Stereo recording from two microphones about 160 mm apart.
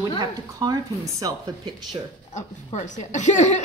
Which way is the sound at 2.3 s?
50° left (ahead or behind).